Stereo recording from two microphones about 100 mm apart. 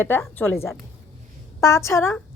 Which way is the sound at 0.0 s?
25° left (ahead or behind).